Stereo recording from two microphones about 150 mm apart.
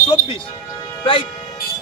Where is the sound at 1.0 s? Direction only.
35° left (ahead or behind).